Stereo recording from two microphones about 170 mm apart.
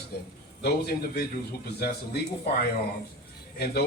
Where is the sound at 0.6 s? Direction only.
70° left (ahead or behind).